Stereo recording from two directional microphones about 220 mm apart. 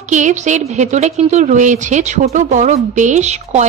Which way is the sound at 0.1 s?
35° right (ahead or behind).